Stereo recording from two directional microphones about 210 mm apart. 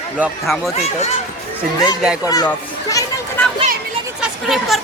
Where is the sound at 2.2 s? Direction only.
15° left (ahead or behind).